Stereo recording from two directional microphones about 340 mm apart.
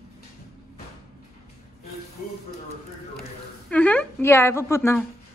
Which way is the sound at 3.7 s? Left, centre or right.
Centre.